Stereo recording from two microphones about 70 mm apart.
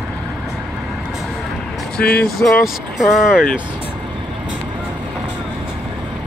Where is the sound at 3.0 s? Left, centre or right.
Centre.